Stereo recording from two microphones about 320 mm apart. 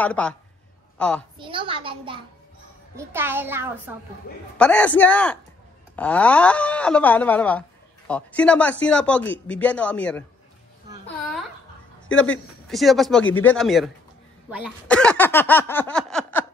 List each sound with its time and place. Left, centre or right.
0.0 s a woman's voice: centre
1.4 s a child's voice: centre
12.6 s speech: centre